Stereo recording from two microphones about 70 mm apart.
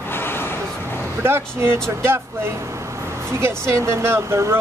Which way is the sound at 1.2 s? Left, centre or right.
Right.